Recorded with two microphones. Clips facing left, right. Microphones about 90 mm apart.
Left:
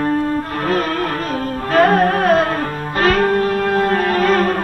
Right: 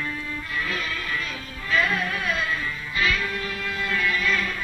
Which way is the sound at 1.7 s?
50° left (ahead or behind).